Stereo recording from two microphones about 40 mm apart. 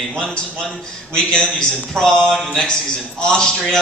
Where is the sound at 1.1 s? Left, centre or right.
Centre.